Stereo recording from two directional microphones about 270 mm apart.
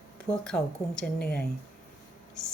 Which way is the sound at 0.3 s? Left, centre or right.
Centre.